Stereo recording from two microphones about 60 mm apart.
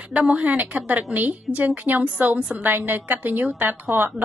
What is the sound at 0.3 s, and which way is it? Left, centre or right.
A woman's voice, right.